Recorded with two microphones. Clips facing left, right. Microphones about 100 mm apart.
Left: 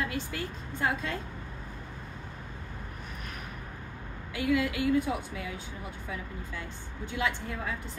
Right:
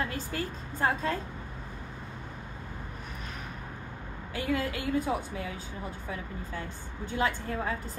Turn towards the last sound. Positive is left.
turn(degrees=-35)  # may be behind; listen again after turning